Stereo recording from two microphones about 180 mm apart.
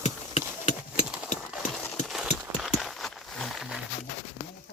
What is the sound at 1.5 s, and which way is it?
Clip-clop, 5° right (ahead or behind).